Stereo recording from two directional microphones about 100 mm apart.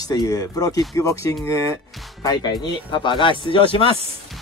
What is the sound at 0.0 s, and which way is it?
Speech, 40° left (ahead or behind).